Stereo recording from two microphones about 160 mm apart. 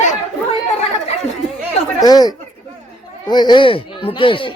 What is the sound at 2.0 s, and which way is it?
Speech, 25° left (ahead or behind).